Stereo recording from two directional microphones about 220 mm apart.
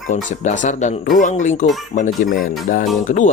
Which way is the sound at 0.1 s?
35° left (ahead or behind).